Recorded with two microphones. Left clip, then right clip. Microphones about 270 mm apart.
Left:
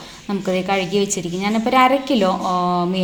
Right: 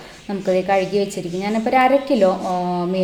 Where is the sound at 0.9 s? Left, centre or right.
Left.